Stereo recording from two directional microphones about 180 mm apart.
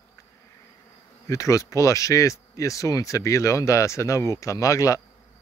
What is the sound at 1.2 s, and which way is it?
Speech, 15° left (ahead or behind).